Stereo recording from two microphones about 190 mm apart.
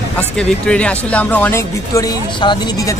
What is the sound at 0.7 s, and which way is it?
Speech, 5° left (ahead or behind).